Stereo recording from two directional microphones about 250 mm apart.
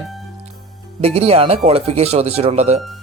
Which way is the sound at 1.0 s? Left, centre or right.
Right.